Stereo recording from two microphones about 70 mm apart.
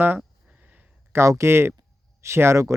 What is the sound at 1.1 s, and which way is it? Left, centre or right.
Speech, right.